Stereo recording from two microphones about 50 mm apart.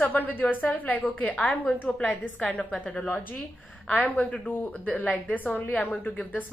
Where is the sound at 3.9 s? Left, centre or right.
Left.